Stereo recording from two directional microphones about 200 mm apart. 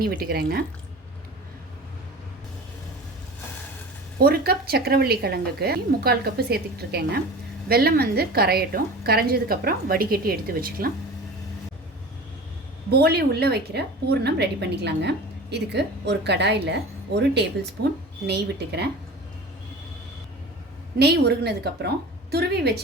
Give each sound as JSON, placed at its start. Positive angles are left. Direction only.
{"t": 0.2, "sound": "a woman's voice", "side_deg": -55}
{"t": 4.2, "sound": "a woman's voice", "side_deg": -50}
{"t": 12.9, "sound": "a woman's voice", "side_deg": -50}
{"t": 21.0, "sound": "a woman's voice", "side_deg": -55}